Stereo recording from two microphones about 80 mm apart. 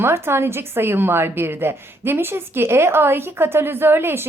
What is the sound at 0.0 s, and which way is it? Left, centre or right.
A woman's voice, right.